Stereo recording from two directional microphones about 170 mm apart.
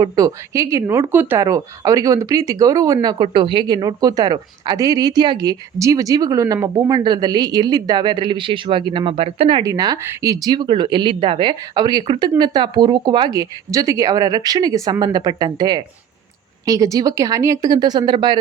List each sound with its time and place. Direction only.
0.0 s speech: 20° right (ahead or behind)